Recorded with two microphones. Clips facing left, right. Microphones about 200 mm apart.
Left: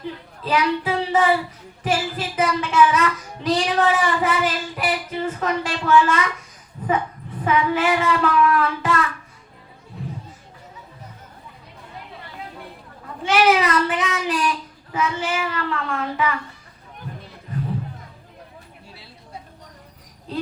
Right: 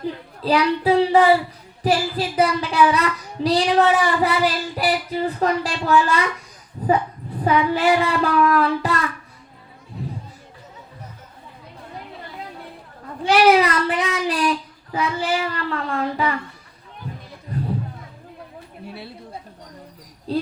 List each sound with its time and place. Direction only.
0.4 s child singing: 35° right (ahead or behind)
6.8 s a sound: 35° right (ahead or behind)
7.4 s child singing: 35° right (ahead or behind)
13.2 s a sound: 35° right (ahead or behind)
14.9 s a child's voice: 35° right (ahead or behind)
20.3 s cricket: 35° right (ahead or behind)